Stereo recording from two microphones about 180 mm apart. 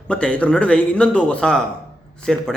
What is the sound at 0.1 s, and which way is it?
A man's voice, 5° left (ahead or behind).